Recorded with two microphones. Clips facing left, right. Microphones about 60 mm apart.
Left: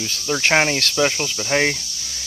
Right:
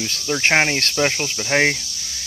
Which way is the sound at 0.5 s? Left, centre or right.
Right.